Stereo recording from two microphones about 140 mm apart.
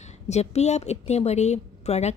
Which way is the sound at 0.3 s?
50° left (ahead or behind).